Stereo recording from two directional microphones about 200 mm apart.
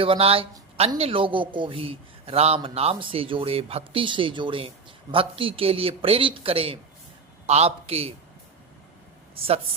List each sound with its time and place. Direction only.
0.0 s a man's voice: 30° right (ahead or behind)